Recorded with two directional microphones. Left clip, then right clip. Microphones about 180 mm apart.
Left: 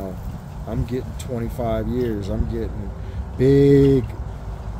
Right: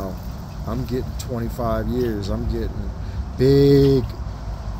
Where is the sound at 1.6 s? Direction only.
10° left (ahead or behind).